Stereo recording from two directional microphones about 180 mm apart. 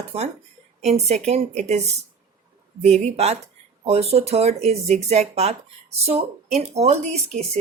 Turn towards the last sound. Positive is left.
turn(degrees=-35)  # may be behind; listen again after turning